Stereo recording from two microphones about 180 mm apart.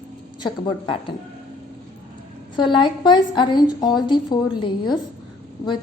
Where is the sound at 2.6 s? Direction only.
25° left (ahead or behind).